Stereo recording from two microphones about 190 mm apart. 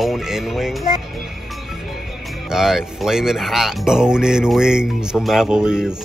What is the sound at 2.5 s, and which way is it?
Speech, centre (ahead or behind).